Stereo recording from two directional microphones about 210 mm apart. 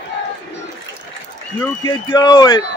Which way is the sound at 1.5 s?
20° left (ahead or behind).